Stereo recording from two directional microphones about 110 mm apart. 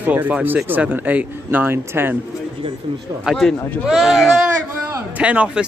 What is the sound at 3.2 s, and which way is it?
Speech, centre (ahead or behind).